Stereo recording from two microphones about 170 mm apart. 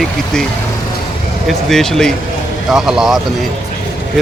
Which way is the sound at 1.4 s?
Centre (ahead or behind).